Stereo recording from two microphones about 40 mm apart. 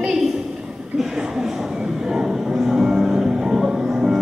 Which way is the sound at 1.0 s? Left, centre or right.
Centre.